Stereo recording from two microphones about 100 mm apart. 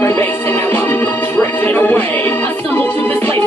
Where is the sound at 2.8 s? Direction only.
15° left (ahead or behind).